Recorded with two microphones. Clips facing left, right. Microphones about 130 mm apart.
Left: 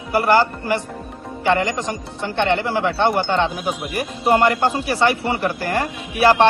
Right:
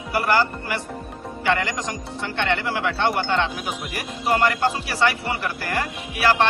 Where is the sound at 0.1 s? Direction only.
35° left (ahead or behind).